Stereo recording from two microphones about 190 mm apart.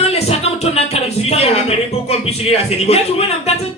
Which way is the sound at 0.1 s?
35° left (ahead or behind).